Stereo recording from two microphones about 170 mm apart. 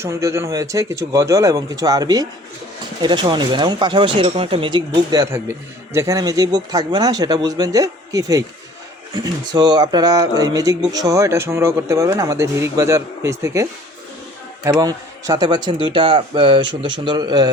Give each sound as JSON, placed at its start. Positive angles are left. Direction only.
{"t": 0.0, "sound": "speech", "side_deg": -15}